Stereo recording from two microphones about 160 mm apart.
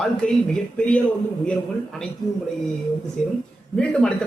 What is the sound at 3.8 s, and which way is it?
Speech, 5° left (ahead or behind).